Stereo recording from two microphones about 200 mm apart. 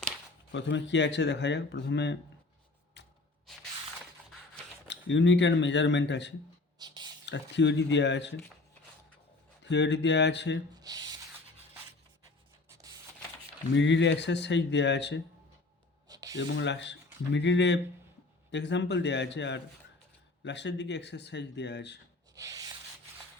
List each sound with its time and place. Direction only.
0.5 s speech: 65° left (ahead or behind)
4.9 s speech: 65° left (ahead or behind)
6.7 s a sound: 20° right (ahead or behind)
7.3 s speech: 60° left (ahead or behind)
9.6 s speech: 60° left (ahead or behind)
10.8 s a sound: 20° right (ahead or behind)
13.7 s speech: 65° left (ahead or behind)
16.0 s a sound: 20° right (ahead or behind)
16.4 s speech: 65° left (ahead or behind)
22.4 s rub: 15° right (ahead or behind)